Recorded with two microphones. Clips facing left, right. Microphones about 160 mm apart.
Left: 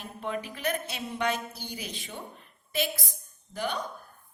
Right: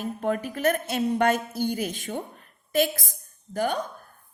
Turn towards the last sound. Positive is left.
turn(degrees=-45)  # may be behind; listen again after turning